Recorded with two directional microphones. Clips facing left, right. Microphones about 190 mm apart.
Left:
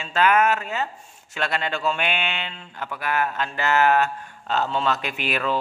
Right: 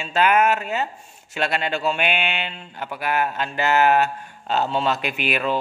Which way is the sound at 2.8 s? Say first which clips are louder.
Right 2 dB; 20° right (ahead or behind).